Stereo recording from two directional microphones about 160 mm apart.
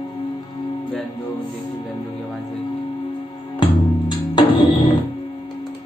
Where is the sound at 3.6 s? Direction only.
30° left (ahead or behind).